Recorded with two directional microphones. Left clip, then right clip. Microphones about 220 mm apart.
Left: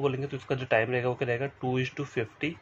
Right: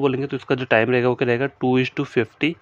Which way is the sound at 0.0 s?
50° right (ahead or behind).